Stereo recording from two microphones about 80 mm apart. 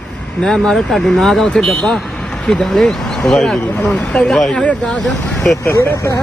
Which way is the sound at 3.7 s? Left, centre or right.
Centre.